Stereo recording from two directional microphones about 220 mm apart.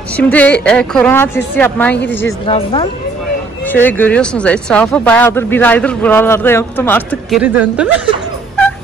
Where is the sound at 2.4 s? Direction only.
25° left (ahead or behind).